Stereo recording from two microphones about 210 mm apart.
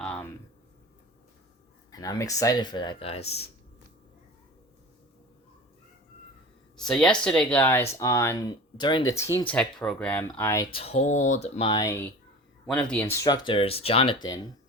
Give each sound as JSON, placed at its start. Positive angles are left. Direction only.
{"t": 1.9, "sound": "speech", "side_deg": 15}
{"t": 6.7, "sound": "speech", "side_deg": 5}
{"t": 9.5, "sound": "speech", "side_deg": 5}
{"t": 10.8, "sound": "speech", "side_deg": 30}